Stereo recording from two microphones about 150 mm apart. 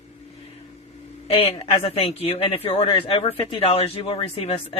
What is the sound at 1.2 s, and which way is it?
Speech, 40° left (ahead or behind).